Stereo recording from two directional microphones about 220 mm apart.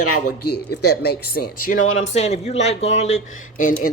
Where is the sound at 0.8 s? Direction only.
45° left (ahead or behind).